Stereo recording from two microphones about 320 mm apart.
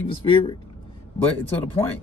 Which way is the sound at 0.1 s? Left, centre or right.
Centre.